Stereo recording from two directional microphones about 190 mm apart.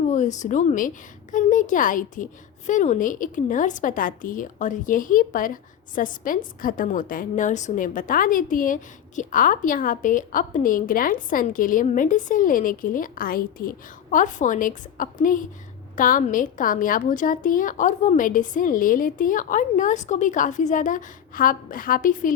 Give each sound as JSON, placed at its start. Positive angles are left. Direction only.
{"t": 0.0, "sound": "a woman's voice", "side_deg": 40}